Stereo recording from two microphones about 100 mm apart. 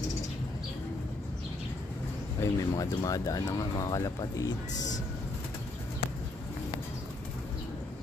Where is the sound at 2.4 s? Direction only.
30° left (ahead or behind).